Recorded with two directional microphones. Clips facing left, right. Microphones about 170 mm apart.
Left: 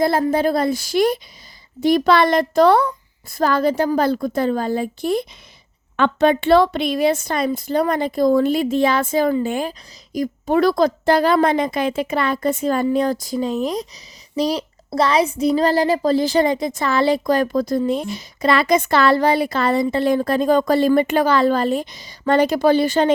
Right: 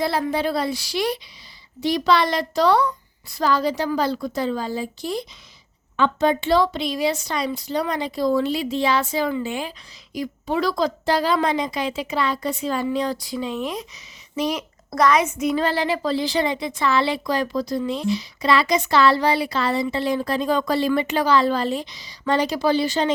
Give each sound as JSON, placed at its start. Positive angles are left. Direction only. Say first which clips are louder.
{"t": 0.0, "sound": "speech", "louder": "left 5 dB", "side_deg": 45}